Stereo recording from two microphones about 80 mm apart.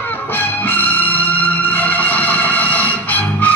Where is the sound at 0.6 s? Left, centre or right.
Left.